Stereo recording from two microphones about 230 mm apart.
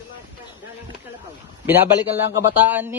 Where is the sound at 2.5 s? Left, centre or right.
Centre.